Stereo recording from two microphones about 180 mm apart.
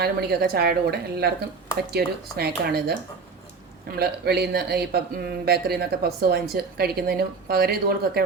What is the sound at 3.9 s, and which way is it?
Speech, 65° right (ahead or behind).